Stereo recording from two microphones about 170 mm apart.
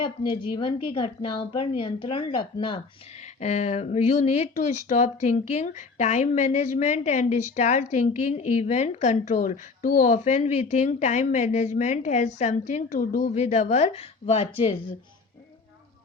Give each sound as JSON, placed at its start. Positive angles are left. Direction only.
{"t": 0.0, "sound": "a woman's voice", "side_deg": 25}
{"t": 3.4, "sound": "speech", "side_deg": 40}
{"t": 13.3, "sound": "a woman's voice", "side_deg": 45}